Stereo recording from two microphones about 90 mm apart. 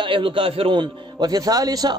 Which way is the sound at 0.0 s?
70° right (ahead or behind).